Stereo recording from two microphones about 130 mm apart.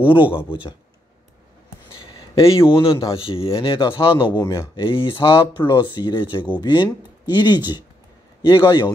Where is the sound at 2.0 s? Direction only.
45° left (ahead or behind).